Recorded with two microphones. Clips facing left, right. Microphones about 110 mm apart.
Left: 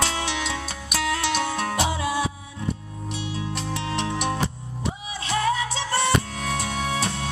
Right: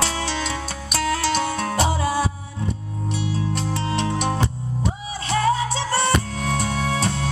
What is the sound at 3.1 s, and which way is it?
Music, 20° left (ahead or behind).